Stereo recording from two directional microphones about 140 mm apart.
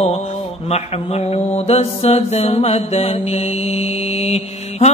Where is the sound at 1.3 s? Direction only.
50° left (ahead or behind).